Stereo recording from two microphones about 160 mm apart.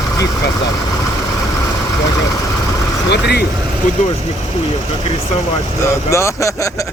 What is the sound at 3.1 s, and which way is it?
Speech, 90° left.